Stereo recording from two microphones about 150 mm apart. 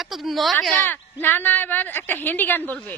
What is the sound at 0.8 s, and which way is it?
A woman's voice, 10° left (ahead or behind).